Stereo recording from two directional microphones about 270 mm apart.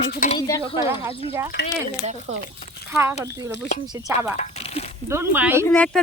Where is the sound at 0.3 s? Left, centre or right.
Centre.